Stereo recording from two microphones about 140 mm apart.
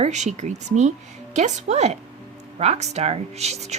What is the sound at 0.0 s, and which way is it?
A woman's voice, 55° right (ahead or behind).